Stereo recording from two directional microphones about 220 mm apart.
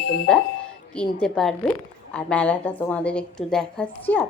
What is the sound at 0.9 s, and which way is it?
A woman's voice, 5° left (ahead or behind).